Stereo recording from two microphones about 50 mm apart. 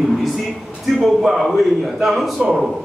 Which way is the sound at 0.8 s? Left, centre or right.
Centre.